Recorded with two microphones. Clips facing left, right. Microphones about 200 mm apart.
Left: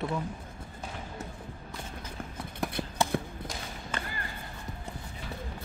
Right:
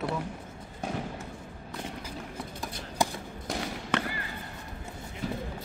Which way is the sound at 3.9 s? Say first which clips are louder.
Right 8 dB; 75° right (ahead or behind).